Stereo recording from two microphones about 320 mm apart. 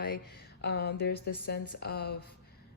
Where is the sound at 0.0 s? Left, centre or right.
Left.